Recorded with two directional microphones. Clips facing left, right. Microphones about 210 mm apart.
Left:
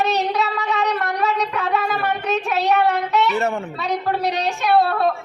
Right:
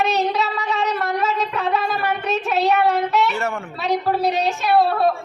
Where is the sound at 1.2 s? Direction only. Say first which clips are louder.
Even; centre (ahead or behind).